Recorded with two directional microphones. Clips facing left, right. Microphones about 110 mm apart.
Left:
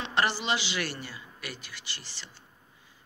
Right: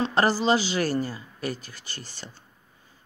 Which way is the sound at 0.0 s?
40° right (ahead or behind).